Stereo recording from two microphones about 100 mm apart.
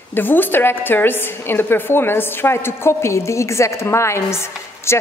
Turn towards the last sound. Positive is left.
turn(degrees=25)  # may be behind; listen again after turning